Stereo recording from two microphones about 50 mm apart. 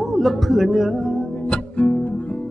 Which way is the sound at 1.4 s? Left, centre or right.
Left.